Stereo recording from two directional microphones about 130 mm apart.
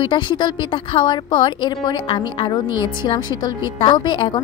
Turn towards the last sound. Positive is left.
turn(degrees=35)  # may be behind; listen again after turning